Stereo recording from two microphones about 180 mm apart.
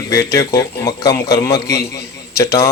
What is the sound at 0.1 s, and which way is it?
A man's voice, 15° left (ahead or behind).